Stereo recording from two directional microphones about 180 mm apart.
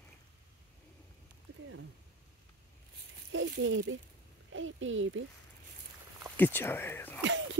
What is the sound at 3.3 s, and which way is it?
A woman's voice, 90° right.